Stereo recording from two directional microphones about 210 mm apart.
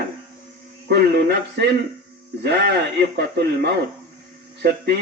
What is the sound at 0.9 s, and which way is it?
Speech, 50° right (ahead or behind).